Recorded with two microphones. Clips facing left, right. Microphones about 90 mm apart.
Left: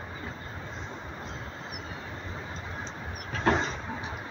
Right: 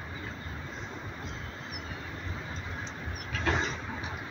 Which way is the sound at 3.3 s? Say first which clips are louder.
Left 5 dB; 35° left (ahead or behind).